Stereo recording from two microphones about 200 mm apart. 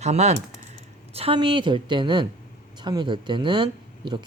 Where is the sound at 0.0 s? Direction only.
35° right (ahead or behind).